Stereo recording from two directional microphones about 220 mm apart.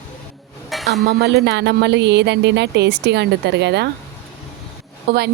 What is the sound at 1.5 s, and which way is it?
A woman's voice, 50° right (ahead or behind).